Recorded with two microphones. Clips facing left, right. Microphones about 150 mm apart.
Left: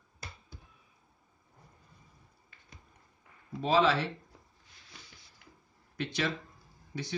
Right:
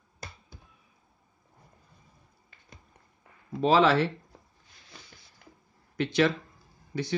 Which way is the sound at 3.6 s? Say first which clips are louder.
Right 5 dB; 75° right (ahead or behind).